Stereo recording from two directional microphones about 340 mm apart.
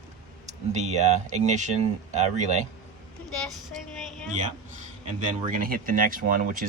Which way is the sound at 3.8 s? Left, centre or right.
Centre.